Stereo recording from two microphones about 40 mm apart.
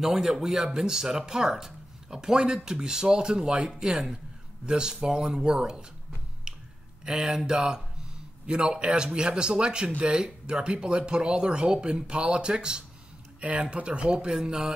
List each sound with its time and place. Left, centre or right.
0.0 s a man's voice: centre
6.5 s a sound: centre
7.1 s a man's voice: centre
13.4 s a man's voice: right
14.1 s speech: centre